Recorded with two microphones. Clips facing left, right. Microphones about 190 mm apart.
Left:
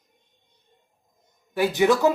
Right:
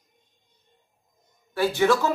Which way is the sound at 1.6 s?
15° left (ahead or behind).